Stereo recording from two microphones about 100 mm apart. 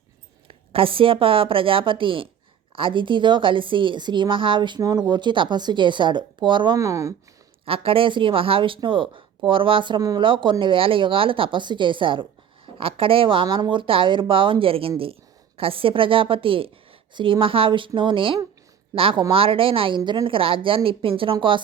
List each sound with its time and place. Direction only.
0.4 s speech: 65° right (ahead or behind)
4.8 s speech: 40° right (ahead or behind)
6.7 s speech: 30° right (ahead or behind)
7.6 s speech: 65° right (ahead or behind)